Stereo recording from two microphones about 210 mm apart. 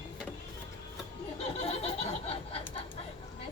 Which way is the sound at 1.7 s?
30° left (ahead or behind).